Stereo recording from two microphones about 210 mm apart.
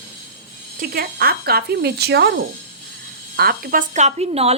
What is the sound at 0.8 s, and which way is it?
A woman's voice, 45° right (ahead or behind).